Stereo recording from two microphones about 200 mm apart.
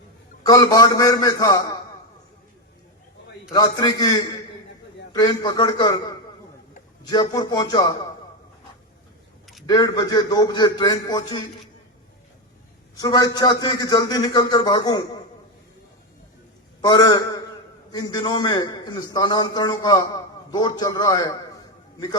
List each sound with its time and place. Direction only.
0.4 s a man's voice: 20° left (ahead or behind)
3.5 s a man's voice: 20° left (ahead or behind)
9.6 s a man's voice: 20° left (ahead or behind)
13.0 s a man's voice: 20° left (ahead or behind)
16.8 s a man's voice: 20° left (ahead or behind)